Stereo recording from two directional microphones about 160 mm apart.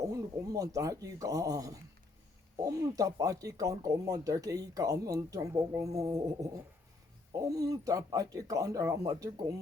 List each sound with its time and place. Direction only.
0.4 s speech: 20° right (ahead or behind)
7.5 s speech: 20° right (ahead or behind)